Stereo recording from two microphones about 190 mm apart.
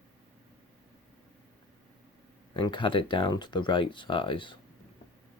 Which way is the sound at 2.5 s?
25° left (ahead or behind).